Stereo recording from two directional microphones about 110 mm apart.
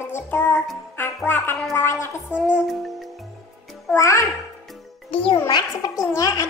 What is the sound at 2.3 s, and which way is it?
Music, 10° right (ahead or behind).